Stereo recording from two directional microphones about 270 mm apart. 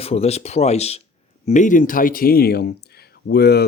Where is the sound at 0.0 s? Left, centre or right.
Left.